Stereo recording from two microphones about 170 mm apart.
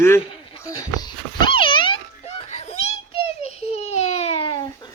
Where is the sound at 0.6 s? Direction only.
25° left (ahead or behind).